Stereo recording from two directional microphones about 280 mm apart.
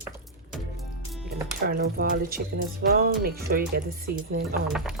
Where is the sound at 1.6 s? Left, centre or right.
Right.